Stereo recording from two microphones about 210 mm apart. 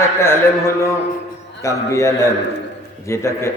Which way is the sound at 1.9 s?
15° left (ahead or behind).